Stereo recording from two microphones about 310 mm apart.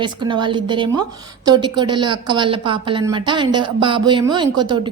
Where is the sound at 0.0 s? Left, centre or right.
Centre.